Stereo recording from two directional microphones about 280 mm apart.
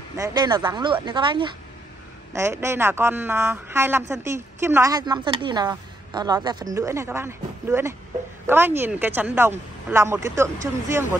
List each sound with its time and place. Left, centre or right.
0.2 s speech: centre